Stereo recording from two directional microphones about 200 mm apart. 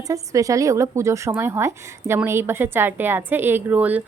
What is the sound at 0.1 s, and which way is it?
A woman's voice, 15° right (ahead or behind).